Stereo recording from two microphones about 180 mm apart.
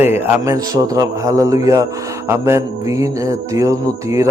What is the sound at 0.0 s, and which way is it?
A man's voice, 15° right (ahead or behind).